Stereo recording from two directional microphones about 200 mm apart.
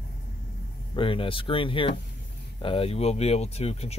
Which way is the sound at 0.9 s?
25° left (ahead or behind).